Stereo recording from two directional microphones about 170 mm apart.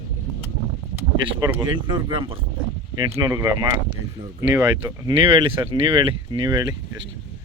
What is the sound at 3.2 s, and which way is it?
Speech, 20° right (ahead or behind).